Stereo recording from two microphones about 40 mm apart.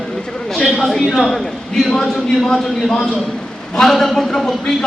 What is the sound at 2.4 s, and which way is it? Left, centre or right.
A man's voice, centre.